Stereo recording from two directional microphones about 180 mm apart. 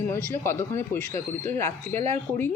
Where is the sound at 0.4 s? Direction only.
15° left (ahead or behind).